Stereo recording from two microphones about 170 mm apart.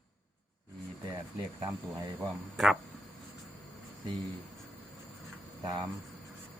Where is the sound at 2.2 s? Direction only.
Centre (ahead or behind).